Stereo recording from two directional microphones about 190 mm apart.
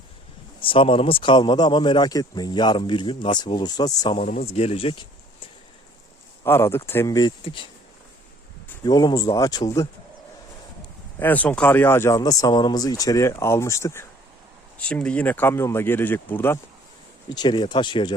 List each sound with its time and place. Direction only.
0.6 s a man's voice: 30° left (ahead or behind)
6.4 s speech: 10° left (ahead or behind)
8.8 s a man's voice: 20° left (ahead or behind)
11.2 s speech: 10° left (ahead or behind)
17.3 s a man's voice: 25° left (ahead or behind)